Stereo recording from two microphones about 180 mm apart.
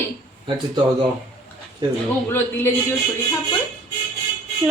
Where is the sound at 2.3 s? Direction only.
10° left (ahead or behind).